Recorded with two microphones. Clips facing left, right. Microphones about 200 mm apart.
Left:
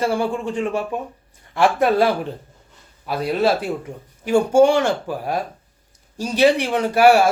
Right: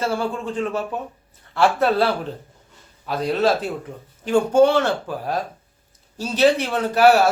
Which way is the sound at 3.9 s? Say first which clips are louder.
Left 2 dB; 30° left (ahead or behind).